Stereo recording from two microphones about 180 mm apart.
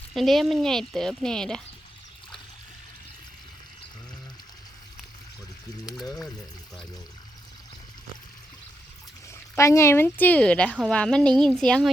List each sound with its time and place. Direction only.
0.1 s speech: centre (ahead or behind)
5.8 s speech: 20° left (ahead or behind)
9.3 s speech: 15° left (ahead or behind)